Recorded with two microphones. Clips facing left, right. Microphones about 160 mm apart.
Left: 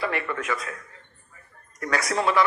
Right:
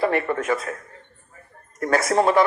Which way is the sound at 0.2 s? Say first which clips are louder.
Right 6 dB; 40° right (ahead or behind).